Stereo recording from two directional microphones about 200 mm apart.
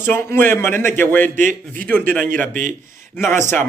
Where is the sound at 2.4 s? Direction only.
40° right (ahead or behind).